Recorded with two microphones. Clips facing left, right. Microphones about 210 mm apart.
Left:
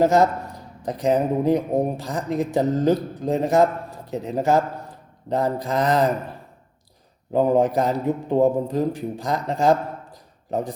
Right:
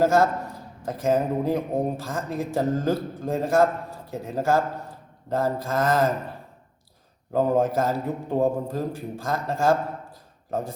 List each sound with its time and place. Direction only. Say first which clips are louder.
0.0 s a man's voice: left 2 dB; 15° left (ahead or behind)
5.3 s mantra: left 2 dB; 20° left (ahead or behind)
7.3 s a man's voice: left 3 dB; 15° left (ahead or behind)